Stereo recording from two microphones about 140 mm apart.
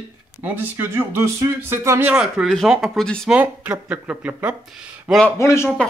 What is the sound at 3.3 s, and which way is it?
Speech, 10° right (ahead or behind).